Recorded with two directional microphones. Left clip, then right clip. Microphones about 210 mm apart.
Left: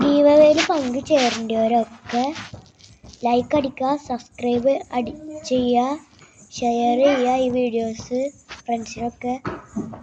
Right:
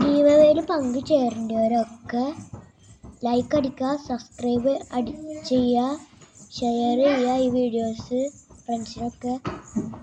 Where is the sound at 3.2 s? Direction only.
15° right (ahead or behind).